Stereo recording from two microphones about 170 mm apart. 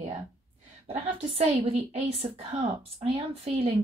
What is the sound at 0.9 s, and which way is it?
A woman's voice, 35° right (ahead or behind).